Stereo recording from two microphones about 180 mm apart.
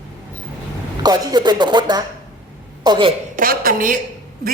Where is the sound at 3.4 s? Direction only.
50° right (ahead or behind).